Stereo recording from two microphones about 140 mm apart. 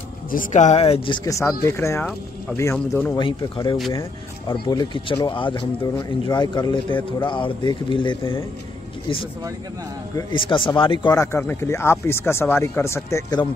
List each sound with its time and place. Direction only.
0.3 s speech: 65° left (ahead or behind); by 1.2 s 40° left (ahead or behind)
1.2 s speech: 20° left (ahead or behind)
3.2 s speech: 35° left (ahead or behind)
10.3 s speech: 35° left (ahead or behind)
11.1 s speech: 15° left (ahead or behind)